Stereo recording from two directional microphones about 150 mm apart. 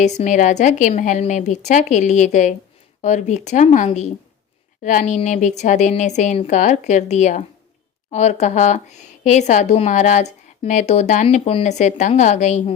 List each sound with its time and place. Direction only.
0.0 s speech: 55° left (ahead or behind)